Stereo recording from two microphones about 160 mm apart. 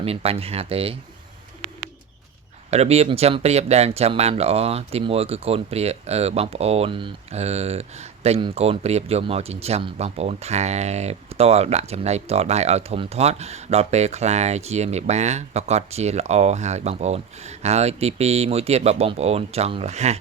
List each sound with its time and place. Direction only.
0.0 s speech: 35° right (ahead or behind)
2.6 s speech: 40° right (ahead or behind)